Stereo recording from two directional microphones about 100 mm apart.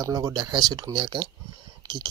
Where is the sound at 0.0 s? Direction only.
35° right (ahead or behind).